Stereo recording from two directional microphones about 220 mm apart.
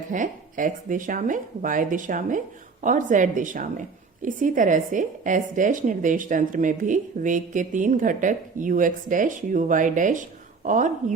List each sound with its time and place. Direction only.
0.1 s a woman's voice: 35° right (ahead or behind)